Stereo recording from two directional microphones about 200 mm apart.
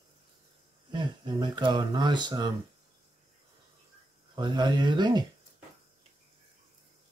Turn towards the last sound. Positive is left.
turn(degrees=-20)  # may be behind; listen again after turning